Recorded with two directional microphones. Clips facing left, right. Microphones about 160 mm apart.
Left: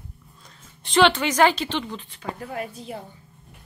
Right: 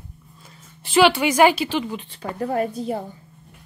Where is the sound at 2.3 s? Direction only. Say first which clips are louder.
Right 14 dB; 40° right (ahead or behind).